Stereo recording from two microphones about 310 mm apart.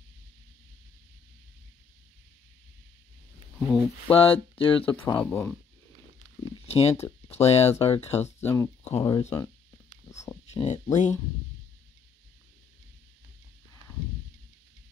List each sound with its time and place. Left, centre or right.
3.5 s speech: centre
4.1 s speech: centre
4.8 s speech: centre
6.7 s speech: centre
8.2 s speech: centre